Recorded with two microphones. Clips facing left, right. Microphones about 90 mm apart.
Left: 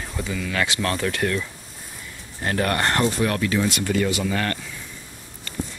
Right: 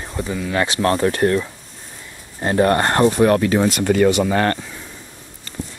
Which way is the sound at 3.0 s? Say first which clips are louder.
Right 8 dB; 50° right (ahead or behind).